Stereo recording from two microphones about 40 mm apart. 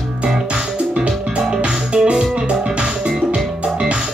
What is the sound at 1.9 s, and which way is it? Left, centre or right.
Music, right.